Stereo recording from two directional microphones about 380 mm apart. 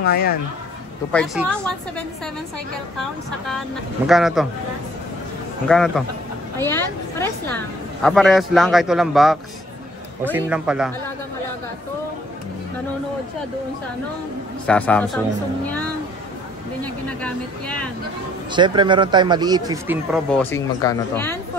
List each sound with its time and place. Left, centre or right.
0.0 s speech: left
1.1 s a woman's voice: centre
4.1 s a woman's voice: centre
5.7 s a woman's voice: centre
14.7 s a woman's voice: centre
16.8 s a woman's voice: centre
18.5 s speech: centre